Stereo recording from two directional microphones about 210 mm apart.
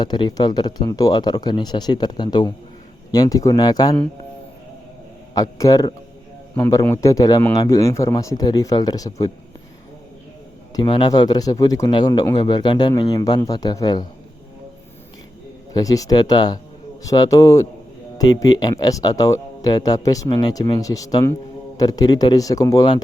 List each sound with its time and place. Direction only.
0.0 s speech: 20° left (ahead or behind)
5.3 s a man's voice: 15° left (ahead or behind)
10.8 s speech: 20° left (ahead or behind)
15.7 s a man's voice: 15° left (ahead or behind)